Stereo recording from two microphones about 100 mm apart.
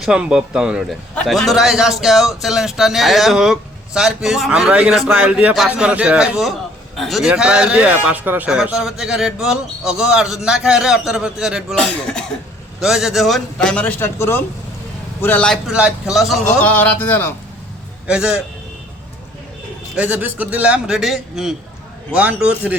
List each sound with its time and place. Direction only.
0.0 s a man's voice: 10° right (ahead or behind)
8.4 s speech: 5° right (ahead or behind)
11.8 s speech: 10° left (ahead or behind)
12.8 s speech: 5° right (ahead or behind); by 13.9 s 10° left (ahead or behind)
14.0 s speech: 25° left (ahead or behind)
15.6 s speech: 5° right (ahead or behind)
16.6 s speech: 15° left (ahead or behind)
18.0 s a man's voice: 10° right (ahead or behind)
20.0 s a man's voice: 20° right (ahead or behind)
22.1 s a man's voice: 15° right (ahead or behind)